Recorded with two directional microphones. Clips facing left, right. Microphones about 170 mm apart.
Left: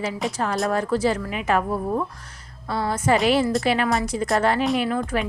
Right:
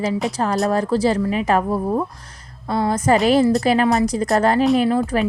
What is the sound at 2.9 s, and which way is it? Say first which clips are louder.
A woman's voice: right 3 dB; 40° right (ahead or behind).